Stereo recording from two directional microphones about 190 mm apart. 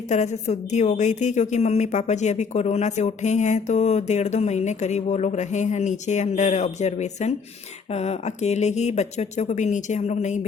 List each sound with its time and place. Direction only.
0.1 s a woman's voice: 35° left (ahead or behind)